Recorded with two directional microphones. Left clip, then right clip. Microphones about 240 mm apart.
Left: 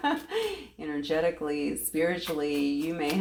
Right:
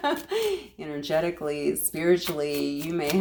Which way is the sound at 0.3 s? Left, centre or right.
Right.